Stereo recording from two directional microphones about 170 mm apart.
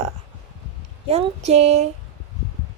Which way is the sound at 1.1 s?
40° right (ahead or behind).